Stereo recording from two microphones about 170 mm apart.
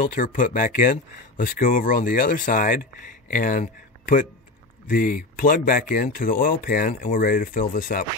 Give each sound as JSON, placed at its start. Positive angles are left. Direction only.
{"t": 0.0, "sound": "speech", "side_deg": 55}